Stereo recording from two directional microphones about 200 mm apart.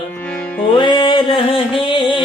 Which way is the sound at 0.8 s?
25° left (ahead or behind).